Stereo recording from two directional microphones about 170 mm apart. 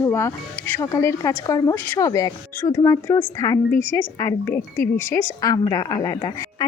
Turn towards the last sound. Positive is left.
turn(degrees=25)  # may be behind; listen again after turning